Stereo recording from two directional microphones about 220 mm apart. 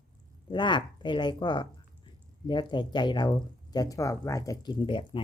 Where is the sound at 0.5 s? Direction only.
20° left (ahead or behind).